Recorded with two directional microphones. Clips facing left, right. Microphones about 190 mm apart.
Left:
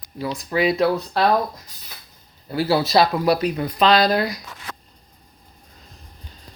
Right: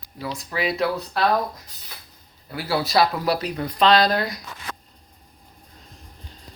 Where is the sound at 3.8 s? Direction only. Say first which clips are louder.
Left 1 dB; 10° left (ahead or behind).